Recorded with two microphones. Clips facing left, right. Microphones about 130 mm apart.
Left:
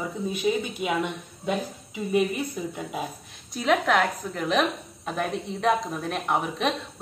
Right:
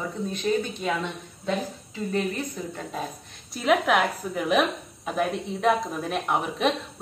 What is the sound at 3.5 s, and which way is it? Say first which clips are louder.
A woman's voice: right 1 dB; 5° right (ahead or behind).